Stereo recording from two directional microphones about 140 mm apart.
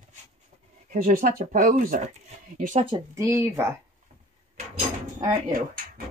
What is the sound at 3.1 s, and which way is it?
Speech, 20° right (ahead or behind).